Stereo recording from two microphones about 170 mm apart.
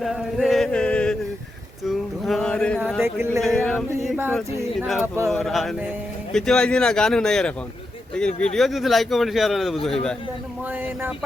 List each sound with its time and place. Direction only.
0.0 s a sound: centre (ahead or behind)
3.0 s speech: 15° right (ahead or behind)
3.4 s speech: centre (ahead or behind)
5.0 s speech: 15° right (ahead or behind)
5.3 s speech: centre (ahead or behind)